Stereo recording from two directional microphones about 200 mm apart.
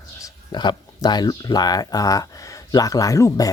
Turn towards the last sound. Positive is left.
turn(degrees=15)  # may be behind; listen again after turning